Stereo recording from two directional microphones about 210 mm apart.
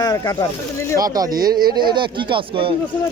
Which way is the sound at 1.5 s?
45° right (ahead or behind).